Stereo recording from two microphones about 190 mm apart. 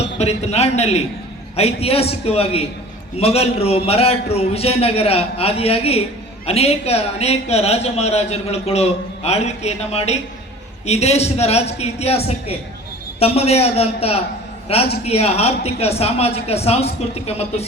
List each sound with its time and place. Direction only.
0.2 s a man's voice: 35° left (ahead or behind)